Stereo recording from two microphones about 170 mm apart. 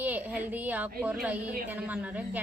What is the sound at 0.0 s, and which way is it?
A woman's voice, 10° right (ahead or behind).